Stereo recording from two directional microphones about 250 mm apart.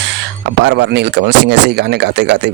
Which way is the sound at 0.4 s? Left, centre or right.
Right.